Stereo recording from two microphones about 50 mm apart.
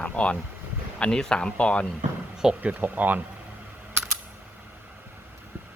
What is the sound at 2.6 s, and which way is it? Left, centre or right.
Speech, right.